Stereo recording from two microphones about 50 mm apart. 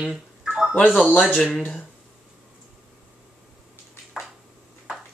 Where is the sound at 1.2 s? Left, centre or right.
Centre.